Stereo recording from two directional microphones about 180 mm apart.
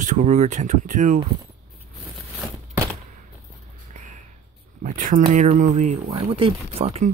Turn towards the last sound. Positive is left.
turn(degrees=-35)  # may be behind; listen again after turning